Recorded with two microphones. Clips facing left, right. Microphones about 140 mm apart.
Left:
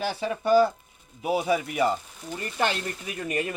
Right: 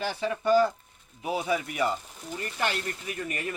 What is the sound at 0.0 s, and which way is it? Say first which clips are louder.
Speech: left 1 dB; 10° left (ahead or behind).